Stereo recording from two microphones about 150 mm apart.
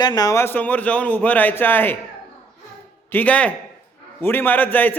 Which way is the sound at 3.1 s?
10° left (ahead or behind).